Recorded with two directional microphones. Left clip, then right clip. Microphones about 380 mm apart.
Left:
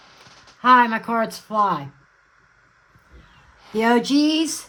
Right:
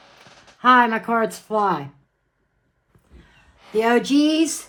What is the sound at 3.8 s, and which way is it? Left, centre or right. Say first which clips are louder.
Speech: right 1 dB; left.